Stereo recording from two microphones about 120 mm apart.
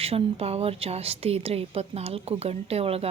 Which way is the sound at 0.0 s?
55° right (ahead or behind).